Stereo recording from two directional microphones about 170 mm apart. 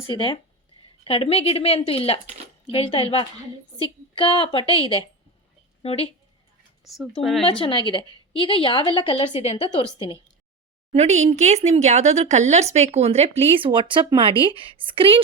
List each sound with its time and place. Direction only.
0.1 s a woman's voice: 30° left (ahead or behind)
6.8 s speech: centre (ahead or behind)
7.6 s a woman's voice: 30° left (ahead or behind)
10.9 s speech: 40° right (ahead or behind)